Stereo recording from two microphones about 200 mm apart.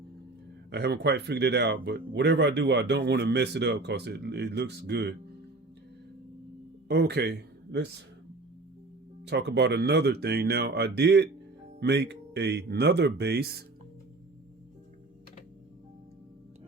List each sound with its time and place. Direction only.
0.7 s speech: 55° right (ahead or behind)
6.8 s speech: 55° right (ahead or behind)
9.2 s speech: 60° right (ahead or behind)